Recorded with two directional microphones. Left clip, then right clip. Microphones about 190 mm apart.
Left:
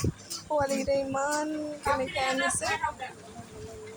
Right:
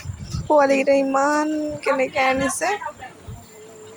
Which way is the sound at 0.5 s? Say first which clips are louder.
Right 11 dB; 30° right (ahead or behind).